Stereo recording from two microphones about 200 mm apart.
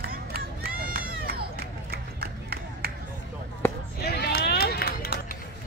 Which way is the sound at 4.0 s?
55° left (ahead or behind).